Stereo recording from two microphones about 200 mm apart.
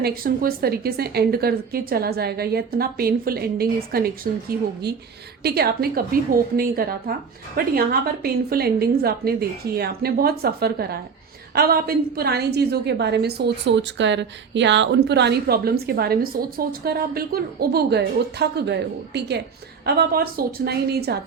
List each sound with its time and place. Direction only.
0.0 s a woman's voice: 50° right (ahead or behind)